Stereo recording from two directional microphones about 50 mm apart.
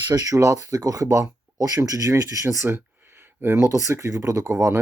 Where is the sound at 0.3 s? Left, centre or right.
Right.